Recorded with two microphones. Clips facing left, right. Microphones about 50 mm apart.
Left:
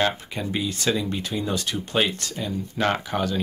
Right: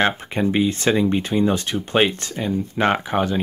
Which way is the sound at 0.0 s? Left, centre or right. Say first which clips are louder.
Right 5 dB; right.